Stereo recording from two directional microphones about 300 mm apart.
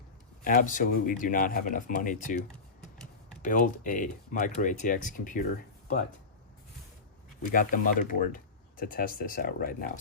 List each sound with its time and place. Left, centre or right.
0.4 s speech: left
3.4 s speech: left
7.5 s speech: left